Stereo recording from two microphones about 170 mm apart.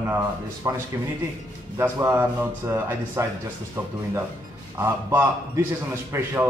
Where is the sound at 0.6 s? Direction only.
20° right (ahead or behind).